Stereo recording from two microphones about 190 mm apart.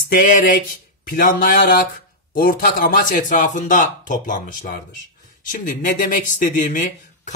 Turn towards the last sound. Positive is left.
turn(degrees=40)  # may be behind; listen again after turning